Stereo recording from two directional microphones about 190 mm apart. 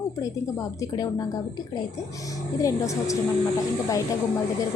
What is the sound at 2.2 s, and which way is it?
Speech, 15° left (ahead or behind).